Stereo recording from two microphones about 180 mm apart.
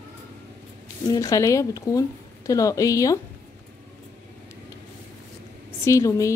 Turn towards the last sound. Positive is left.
turn(degrees=15)  # may be behind; listen again after turning